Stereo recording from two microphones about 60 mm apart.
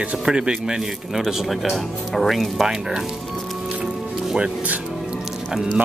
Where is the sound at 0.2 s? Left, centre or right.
Centre.